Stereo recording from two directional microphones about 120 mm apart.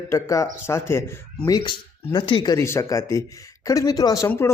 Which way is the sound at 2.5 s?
25° left (ahead or behind).